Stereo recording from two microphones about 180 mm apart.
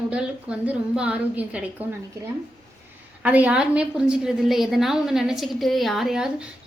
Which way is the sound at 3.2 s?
10° right (ahead or behind).